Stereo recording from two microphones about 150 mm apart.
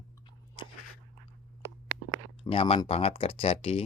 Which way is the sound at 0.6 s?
30° left (ahead or behind).